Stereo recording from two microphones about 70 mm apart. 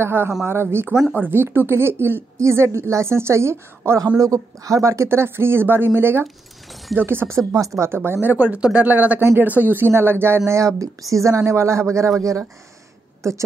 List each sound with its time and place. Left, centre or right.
0.0 s speech: right
4.2 s speech: right
13.2 s a woman's voice: right